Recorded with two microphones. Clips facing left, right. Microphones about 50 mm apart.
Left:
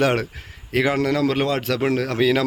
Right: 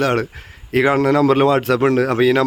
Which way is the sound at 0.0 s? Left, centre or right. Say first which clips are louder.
Right 2 dB; centre.